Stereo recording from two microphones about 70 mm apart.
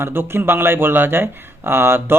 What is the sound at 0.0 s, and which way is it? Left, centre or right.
Speech, right.